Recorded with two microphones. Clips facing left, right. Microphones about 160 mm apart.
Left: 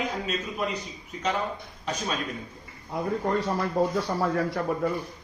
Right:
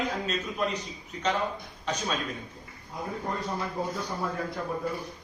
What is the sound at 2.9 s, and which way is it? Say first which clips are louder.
Speech: left 7 dB; 80° left.